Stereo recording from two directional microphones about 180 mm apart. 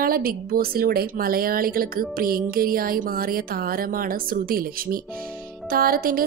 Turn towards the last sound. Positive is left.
turn(degrees=-55)  # may be behind; listen again after turning